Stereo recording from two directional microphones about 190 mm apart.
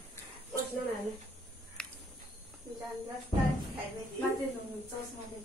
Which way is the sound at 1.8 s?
5° left (ahead or behind).